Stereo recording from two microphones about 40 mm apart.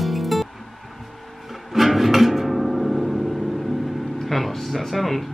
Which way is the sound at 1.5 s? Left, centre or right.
Centre.